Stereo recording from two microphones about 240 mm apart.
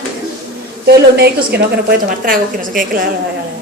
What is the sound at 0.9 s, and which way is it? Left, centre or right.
A woman's voice, right.